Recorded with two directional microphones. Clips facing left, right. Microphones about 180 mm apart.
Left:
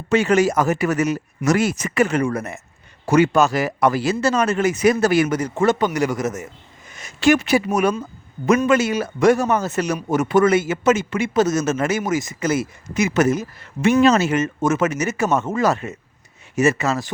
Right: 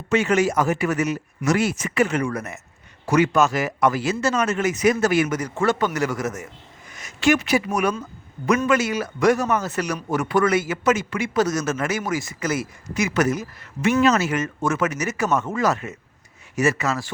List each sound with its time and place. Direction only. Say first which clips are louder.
0.1 s speech: left 3 dB; 35° left (ahead or behind)
2.2 s a man's voice: left 4 dB; 30° left (ahead or behind)
5.5 s a man's voice: left 3 dB; 20° left (ahead or behind)
6.9 s a man's voice: left 3 dB; 30° left (ahead or behind)